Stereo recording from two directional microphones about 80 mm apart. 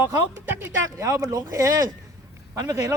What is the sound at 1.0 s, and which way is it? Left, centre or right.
Speech, right.